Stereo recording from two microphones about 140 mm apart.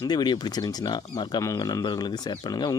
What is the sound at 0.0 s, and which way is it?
Speech, 30° left (ahead or behind).